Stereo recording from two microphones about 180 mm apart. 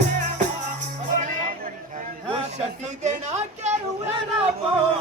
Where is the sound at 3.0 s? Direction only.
40° right (ahead or behind).